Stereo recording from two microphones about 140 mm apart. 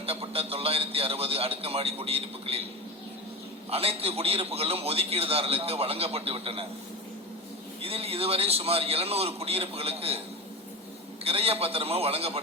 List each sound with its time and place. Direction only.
0.0 s a man's voice: 45° right (ahead or behind)
3.7 s a man's voice: 45° right (ahead or behind)
7.8 s a man's voice: 45° right (ahead or behind)
11.2 s a man's voice: 45° right (ahead or behind)